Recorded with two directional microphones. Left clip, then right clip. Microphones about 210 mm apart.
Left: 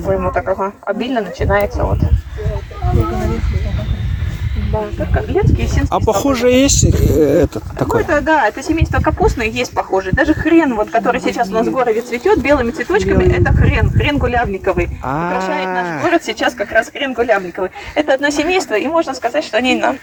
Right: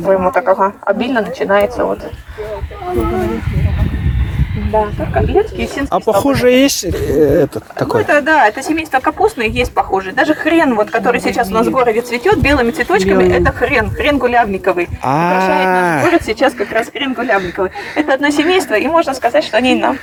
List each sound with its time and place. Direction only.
0.0 s speech: 30° right (ahead or behind)
5.9 s speech: 15° left (ahead or behind)
8.0 s a woman's voice: 45° right (ahead or behind)
15.0 s speech: 15° right (ahead or behind)
16.1 s speech: centre (ahead or behind)
18.7 s speech: 25° right (ahead or behind)
19.6 s speech: 10° right (ahead or behind)